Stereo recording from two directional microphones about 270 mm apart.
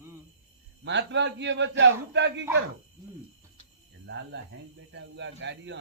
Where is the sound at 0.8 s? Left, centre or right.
Right.